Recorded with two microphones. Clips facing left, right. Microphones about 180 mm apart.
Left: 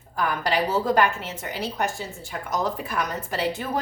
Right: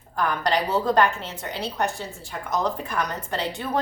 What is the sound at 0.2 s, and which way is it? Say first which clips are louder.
A woman's voice: right 1 dB; 5° left (ahead or behind).